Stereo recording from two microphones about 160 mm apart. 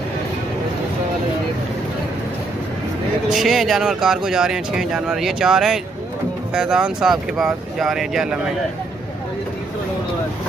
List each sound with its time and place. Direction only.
3.3 s speech: centre (ahead or behind)